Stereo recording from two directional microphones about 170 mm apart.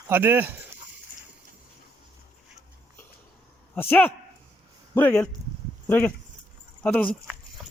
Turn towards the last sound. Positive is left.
turn(degrees=10)  # may be behind; listen again after turning